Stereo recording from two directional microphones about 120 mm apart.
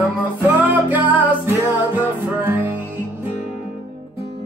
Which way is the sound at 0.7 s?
15° right (ahead or behind).